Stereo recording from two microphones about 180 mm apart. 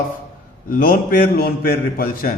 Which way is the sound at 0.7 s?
50° left (ahead or behind).